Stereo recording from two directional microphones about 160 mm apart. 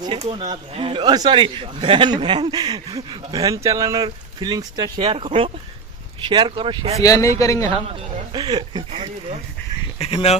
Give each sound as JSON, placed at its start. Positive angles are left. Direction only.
{"t": 0.2, "sound": "a man's voice", "side_deg": -40}
{"t": 7.0, "sound": "speech", "side_deg": 20}
{"t": 7.9, "sound": "a man's voice", "side_deg": -30}
{"t": 10.0, "sound": "speech", "side_deg": 40}